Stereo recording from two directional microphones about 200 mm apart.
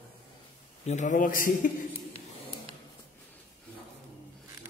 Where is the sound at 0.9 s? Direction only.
35° left (ahead or behind).